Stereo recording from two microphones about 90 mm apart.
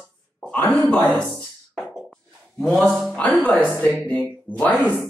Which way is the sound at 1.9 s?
Centre (ahead or behind).